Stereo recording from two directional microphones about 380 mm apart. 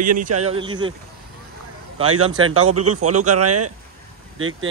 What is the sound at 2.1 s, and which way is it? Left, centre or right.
Speech, right.